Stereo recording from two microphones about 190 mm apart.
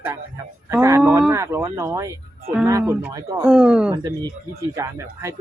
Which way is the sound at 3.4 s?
5° right (ahead or behind).